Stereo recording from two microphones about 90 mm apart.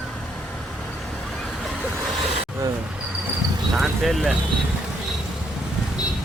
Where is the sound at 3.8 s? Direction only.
Centre (ahead or behind).